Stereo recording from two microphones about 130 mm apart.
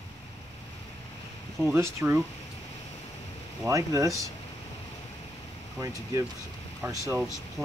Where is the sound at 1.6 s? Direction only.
15° right (ahead or behind).